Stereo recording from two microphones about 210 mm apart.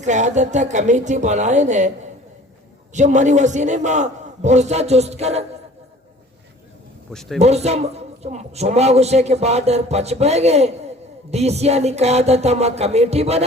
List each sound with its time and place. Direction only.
0.0 s a man's voice: 35° right (ahead or behind)
2.9 s a man's voice: 35° right (ahead or behind)
7.1 s a man's voice: centre (ahead or behind)
7.3 s a man's voice: 30° right (ahead or behind)